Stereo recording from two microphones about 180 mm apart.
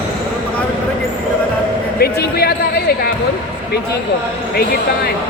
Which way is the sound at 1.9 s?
60° left (ahead or behind).